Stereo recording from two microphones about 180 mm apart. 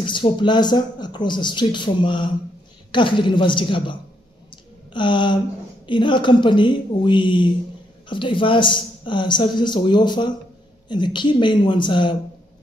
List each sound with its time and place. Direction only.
0.0 s speech: 25° left (ahead or behind)
4.9 s speech: 25° left (ahead or behind)